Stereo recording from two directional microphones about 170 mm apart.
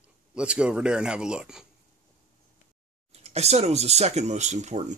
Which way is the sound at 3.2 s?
40° right (ahead or behind).